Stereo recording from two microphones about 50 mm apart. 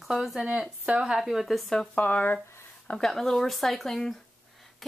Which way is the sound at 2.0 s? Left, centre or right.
Left.